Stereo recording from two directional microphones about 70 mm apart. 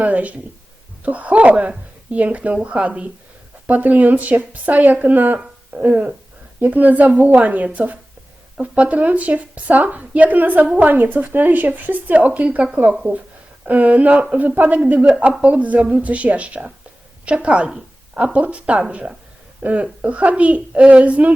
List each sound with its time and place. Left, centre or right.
0.0 s a woman's voice: right
13.0 s a woman's voice: centre